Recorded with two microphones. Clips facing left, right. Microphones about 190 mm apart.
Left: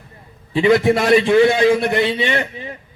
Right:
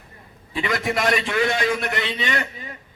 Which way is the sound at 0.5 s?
30° left (ahead or behind).